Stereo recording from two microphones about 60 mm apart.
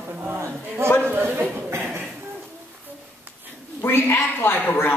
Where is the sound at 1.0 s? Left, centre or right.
Right.